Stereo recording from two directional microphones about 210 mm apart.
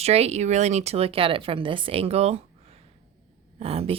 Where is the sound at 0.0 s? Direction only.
30° right (ahead or behind).